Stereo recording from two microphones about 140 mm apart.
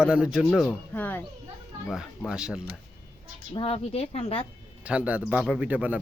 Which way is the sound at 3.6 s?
45° left (ahead or behind).